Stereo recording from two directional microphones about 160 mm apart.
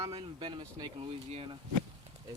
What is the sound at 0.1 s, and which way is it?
Speech, 35° right (ahead or behind).